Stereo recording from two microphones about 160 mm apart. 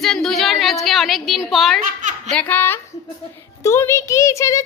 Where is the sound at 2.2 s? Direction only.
10° left (ahead or behind).